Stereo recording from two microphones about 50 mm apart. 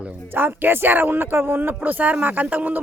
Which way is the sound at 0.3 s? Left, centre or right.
Right.